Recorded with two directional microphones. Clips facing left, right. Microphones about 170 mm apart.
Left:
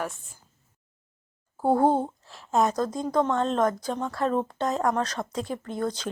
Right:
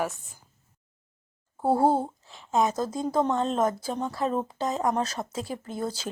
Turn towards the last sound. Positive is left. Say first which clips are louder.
# left 2 dB
turn(degrees=-5)  # may be behind; listen again after turning